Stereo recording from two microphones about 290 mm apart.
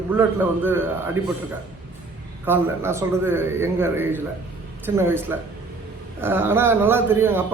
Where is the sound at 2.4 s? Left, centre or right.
Centre.